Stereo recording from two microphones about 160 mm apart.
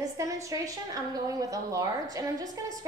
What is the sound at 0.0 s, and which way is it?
A woman's voice, 20° right (ahead or behind).